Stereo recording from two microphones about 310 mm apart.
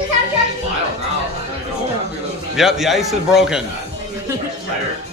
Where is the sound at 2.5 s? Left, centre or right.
Centre.